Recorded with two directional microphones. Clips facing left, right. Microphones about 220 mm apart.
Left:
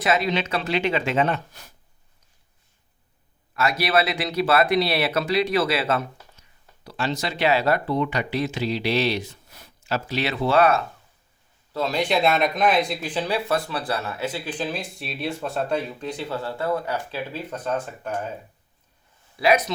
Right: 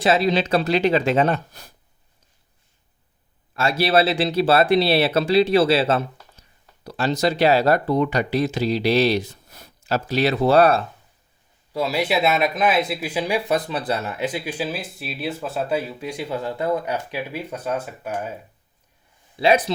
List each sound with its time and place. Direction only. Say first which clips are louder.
0.0 s speech: right 4 dB; 30° right (ahead or behind)
3.5 s speech: right 3 dB; 30° right (ahead or behind)
6.8 s speech: right 6 dB; 40° right (ahead or behind)
11.7 s speech: right 1 dB; 10° right (ahead or behind)
19.4 s speech: right 2 dB; 30° right (ahead or behind)